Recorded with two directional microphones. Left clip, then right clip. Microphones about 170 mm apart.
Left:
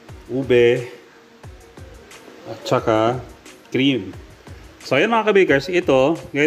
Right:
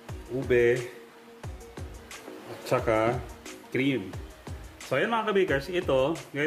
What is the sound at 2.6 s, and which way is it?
Speech, 25° left (ahead or behind).